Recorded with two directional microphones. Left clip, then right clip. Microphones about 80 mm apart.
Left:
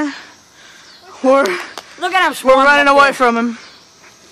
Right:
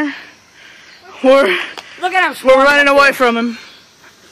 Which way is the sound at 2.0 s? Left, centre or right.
Left.